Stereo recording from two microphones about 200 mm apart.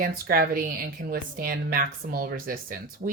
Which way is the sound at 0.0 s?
45° right (ahead or behind).